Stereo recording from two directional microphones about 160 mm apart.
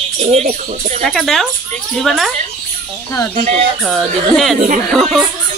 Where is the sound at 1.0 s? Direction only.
Centre (ahead or behind).